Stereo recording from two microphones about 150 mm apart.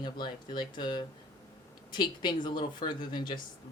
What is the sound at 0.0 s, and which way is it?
Speech, 30° left (ahead or behind).